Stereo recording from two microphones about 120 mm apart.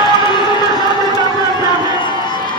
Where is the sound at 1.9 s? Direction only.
40° left (ahead or behind).